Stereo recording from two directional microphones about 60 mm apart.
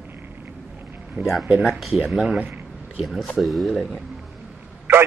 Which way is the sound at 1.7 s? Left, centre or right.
Centre.